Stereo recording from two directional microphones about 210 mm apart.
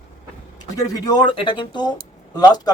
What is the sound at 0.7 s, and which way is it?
Speech, 15° left (ahead or behind).